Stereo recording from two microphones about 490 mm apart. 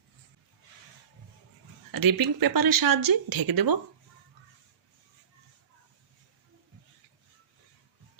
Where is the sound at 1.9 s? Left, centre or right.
Right.